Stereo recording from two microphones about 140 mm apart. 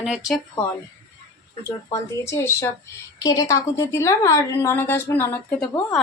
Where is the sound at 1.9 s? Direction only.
20° left (ahead or behind).